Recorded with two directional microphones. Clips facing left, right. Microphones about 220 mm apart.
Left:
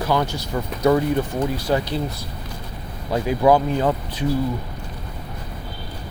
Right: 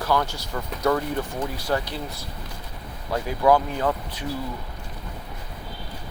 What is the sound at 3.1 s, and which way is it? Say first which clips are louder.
Speech: left 3 dB; 20° left (ahead or behind).